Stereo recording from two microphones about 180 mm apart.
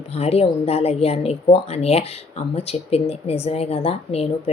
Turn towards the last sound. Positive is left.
turn(degrees=35)  # may be behind; listen again after turning